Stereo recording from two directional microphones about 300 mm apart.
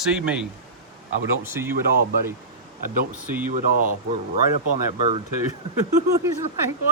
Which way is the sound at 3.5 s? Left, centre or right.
Right.